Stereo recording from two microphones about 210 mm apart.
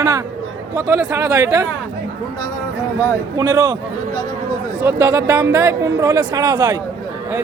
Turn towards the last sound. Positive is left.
turn(degrees=-15)  # may be behind; listen again after turning